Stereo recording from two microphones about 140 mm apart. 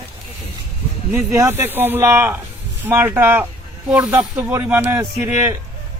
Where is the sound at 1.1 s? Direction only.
15° right (ahead or behind).